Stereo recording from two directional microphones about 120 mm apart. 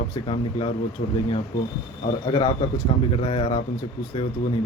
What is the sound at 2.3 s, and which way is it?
Speech, 50° left (ahead or behind).